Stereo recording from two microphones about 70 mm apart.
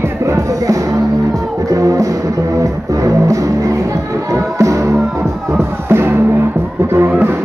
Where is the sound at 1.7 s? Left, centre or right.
Right.